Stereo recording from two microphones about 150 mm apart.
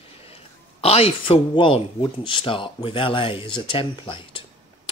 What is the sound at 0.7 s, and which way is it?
Speech, 40° left (ahead or behind).